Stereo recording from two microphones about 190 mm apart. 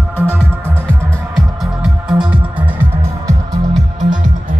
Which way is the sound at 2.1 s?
25° right (ahead or behind).